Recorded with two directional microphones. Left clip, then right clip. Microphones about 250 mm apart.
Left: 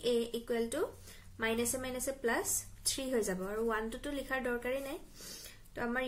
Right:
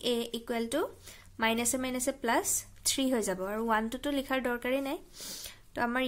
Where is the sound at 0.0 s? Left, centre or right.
Right.